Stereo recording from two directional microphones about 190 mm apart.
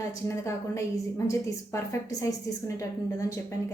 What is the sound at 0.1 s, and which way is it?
A woman's voice, 15° left (ahead or behind).